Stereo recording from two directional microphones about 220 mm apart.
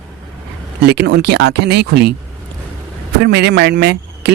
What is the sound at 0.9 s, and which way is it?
Speech, 50° right (ahead or behind).